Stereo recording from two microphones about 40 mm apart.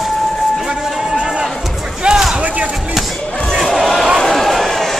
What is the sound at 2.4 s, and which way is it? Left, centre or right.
Chop, right.